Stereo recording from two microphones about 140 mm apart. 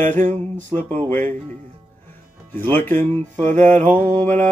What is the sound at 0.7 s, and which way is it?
Speech, 15° left (ahead or behind).